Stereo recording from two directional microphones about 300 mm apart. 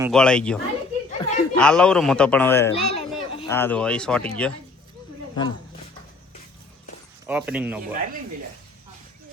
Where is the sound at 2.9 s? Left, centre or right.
Centre.